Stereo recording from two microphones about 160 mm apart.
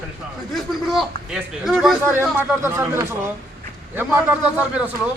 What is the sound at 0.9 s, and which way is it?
Speech, centre (ahead or behind).